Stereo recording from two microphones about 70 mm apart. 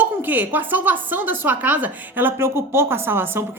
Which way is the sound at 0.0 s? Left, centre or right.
Right.